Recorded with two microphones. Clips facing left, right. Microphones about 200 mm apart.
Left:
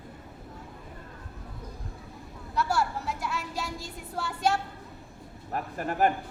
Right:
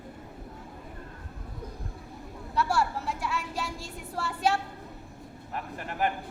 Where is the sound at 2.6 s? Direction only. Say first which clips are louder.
Right 1 dB; centre (ahead or behind).